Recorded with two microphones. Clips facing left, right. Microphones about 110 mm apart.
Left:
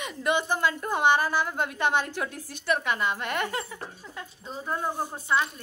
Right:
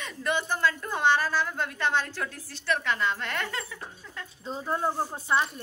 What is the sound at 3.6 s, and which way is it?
Speech, 35° left (ahead or behind).